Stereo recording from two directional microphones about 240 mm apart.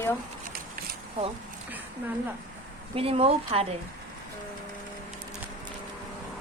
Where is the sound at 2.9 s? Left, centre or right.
Right.